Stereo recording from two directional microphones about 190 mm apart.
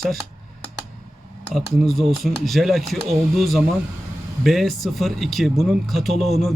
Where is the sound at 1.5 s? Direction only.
Centre (ahead or behind).